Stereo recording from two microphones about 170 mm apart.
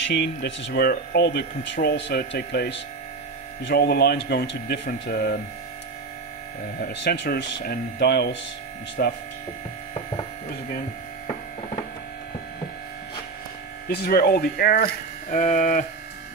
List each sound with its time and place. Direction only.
0.0 s speech: 85° left
6.9 s speech: 80° left
9.0 s speech: 65° left (ahead or behind)
13.8 s speech: 70° left (ahead or behind)
15.3 s electric shaver: 50° left (ahead or behind)